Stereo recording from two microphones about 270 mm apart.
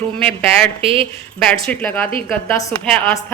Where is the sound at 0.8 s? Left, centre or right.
Right.